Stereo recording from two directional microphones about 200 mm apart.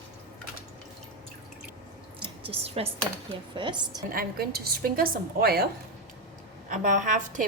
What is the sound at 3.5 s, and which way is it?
Speech, 20° right (ahead or behind).